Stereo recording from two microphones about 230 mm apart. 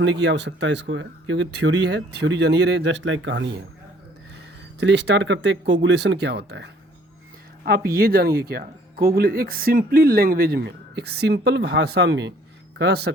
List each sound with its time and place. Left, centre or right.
0.0 s speech: right
4.8 s speech: right